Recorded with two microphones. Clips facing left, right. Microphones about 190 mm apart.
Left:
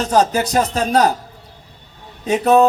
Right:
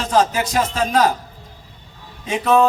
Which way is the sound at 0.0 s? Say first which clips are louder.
Left 2 dB; 40° left (ahead or behind).